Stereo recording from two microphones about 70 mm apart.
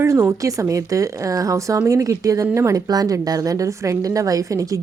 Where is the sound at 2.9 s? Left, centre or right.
Right.